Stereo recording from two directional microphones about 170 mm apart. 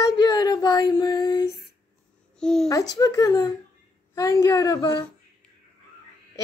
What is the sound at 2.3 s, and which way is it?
Speech, 5° left (ahead or behind).